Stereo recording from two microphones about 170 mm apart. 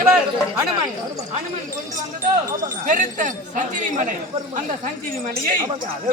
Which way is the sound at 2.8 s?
45° right (ahead or behind).